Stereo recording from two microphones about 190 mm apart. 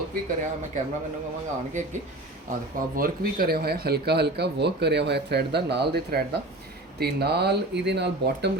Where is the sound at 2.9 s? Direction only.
50° right (ahead or behind).